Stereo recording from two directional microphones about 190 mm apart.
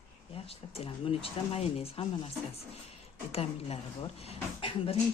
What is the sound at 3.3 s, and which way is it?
Speech, 30° left (ahead or behind).